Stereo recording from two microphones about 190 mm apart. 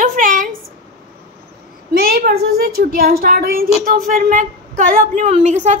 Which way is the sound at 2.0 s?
50° right (ahead or behind).